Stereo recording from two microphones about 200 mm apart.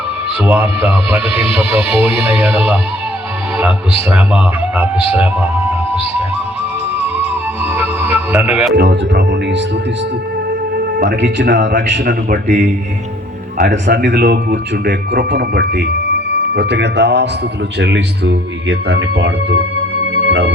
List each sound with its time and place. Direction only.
0.4 s a man's voice: 10° right (ahead or behind)
1.3 s speech: 30° left (ahead or behind)
4.1 s a man's voice: 5° right (ahead or behind)
7.0 s music: 30° left (ahead or behind)
8.1 s music: 10° right (ahead or behind)
8.7 s a man's voice: 60° right (ahead or behind)
10.8 s speech: 55° right (ahead or behind)
12.0 s a man's voice: 40° right (ahead or behind)
13.7 s a man's voice: 60° right (ahead or behind)